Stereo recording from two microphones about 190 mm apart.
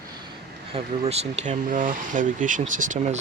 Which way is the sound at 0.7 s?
35° right (ahead or behind).